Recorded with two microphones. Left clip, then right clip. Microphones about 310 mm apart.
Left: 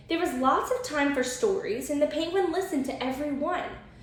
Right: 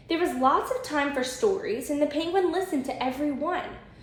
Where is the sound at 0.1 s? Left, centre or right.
Centre.